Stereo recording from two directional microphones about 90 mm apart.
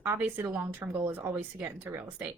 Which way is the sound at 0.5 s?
20° right (ahead or behind).